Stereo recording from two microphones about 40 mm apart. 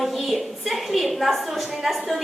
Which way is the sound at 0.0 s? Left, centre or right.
Centre.